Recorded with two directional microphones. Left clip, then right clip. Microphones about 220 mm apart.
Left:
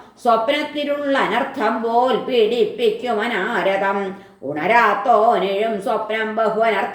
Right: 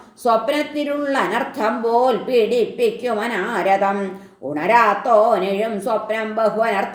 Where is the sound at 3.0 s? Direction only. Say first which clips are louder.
Left 1 dB; 35° right (ahead or behind).